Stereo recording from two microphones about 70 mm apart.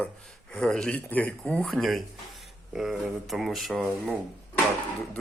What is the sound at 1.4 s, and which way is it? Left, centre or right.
Speech, centre.